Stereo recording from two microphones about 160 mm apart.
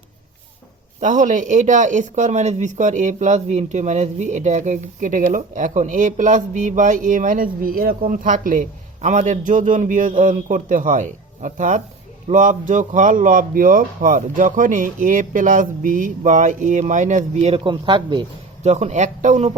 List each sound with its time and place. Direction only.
0.9 s speech: 50° right (ahead or behind)
17.5 s speech: 30° right (ahead or behind)
18.6 s speech: 45° right (ahead or behind)